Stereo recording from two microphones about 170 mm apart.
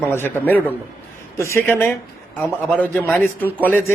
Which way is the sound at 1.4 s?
15° left (ahead or behind).